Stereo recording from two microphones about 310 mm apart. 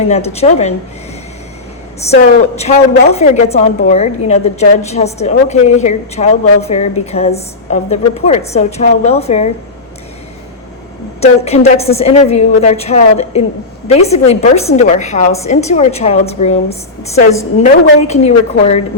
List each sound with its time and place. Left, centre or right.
0.1 s a woman's voice: centre
2.0 s a woman's voice: left
11.2 s a woman's voice: centre
18.1 s a woman's voice: left